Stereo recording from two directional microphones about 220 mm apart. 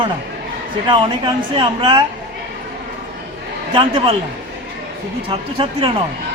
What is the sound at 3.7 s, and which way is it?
Speech, 25° right (ahead or behind).